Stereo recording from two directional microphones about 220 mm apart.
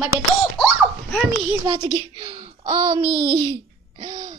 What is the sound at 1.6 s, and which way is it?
A woman's voice, 25° right (ahead or behind).